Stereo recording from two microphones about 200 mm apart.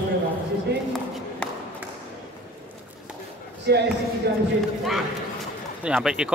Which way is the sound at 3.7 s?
55° right (ahead or behind).